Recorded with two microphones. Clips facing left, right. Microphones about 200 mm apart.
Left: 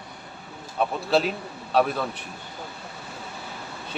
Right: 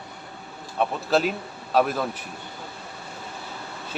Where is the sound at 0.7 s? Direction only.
Centre (ahead or behind).